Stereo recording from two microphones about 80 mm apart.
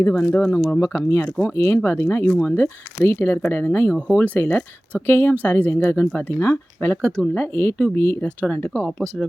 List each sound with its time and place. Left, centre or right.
0.2 s speech: left
2.3 s speech: centre
2.6 s speech: left
7.0 s speech: centre
7.5 s speech: left
8.9 s speech: centre